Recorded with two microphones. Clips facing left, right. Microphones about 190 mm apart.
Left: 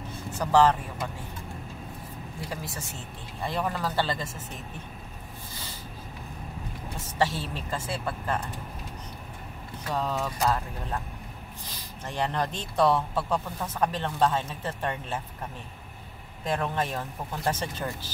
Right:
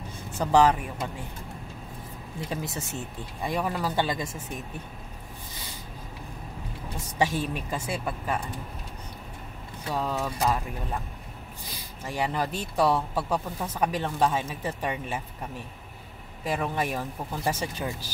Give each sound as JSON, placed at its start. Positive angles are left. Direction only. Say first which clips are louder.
{"t": 0.4, "sound": "speech", "louder": "right 1 dB", "side_deg": -15}
{"t": 2.5, "sound": "speech", "louder": "right 5 dB", "side_deg": -20}
{"t": 3.4, "sound": "speech", "louder": "right 1 dB", "side_deg": -10}
{"t": 7.2, "sound": "speech", "louder": "right 1 dB", "side_deg": -15}
{"t": 9.9, "sound": "speech", "louder": "even", "side_deg": -5}
{"t": 12.0, "sound": "speech", "louder": "even", "side_deg": -10}
{"t": 16.4, "sound": "speech", "louder": "even", "side_deg": -5}